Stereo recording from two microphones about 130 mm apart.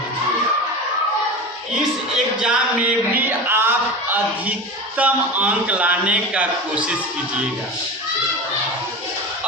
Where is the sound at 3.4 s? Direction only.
15° right (ahead or behind).